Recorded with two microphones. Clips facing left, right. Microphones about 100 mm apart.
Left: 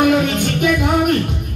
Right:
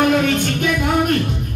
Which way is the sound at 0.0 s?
10° left (ahead or behind).